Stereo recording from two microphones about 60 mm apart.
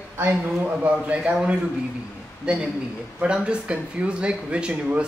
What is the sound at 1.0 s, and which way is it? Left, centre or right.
A woman's voice, centre.